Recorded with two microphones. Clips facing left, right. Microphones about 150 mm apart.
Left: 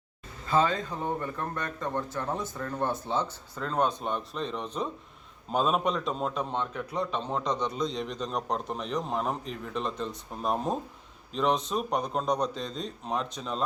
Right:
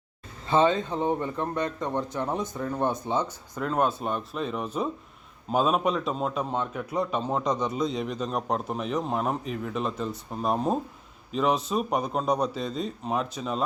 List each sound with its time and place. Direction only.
0.4 s a man's voice: 25° right (ahead or behind); by 13.6 s 5° right (ahead or behind)